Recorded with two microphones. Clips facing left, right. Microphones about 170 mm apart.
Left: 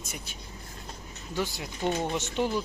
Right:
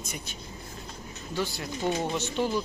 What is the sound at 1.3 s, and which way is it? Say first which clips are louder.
Speech: right 1 dB; 15° left (ahead or behind).